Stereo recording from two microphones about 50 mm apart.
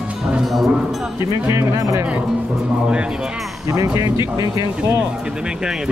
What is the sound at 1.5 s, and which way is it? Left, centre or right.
Speech, right.